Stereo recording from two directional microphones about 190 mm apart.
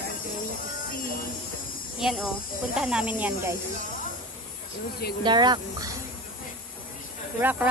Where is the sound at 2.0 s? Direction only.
Centre (ahead or behind).